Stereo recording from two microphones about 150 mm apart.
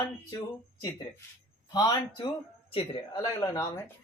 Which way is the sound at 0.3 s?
25° left (ahead or behind).